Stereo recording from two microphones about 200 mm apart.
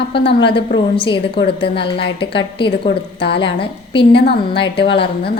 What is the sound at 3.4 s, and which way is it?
Speech, 25° left (ahead or behind).